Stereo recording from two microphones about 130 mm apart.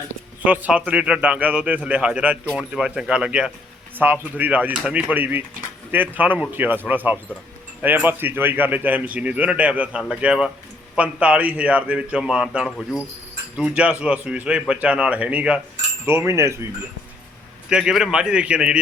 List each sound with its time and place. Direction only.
0.4 s speech: 10° right (ahead or behind)
16.0 s speech: 20° right (ahead or behind)
17.7 s speech: 5° right (ahead or behind)